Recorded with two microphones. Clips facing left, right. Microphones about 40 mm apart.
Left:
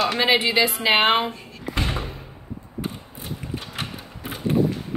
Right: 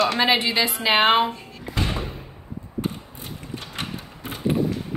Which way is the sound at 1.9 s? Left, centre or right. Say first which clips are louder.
Even; centre.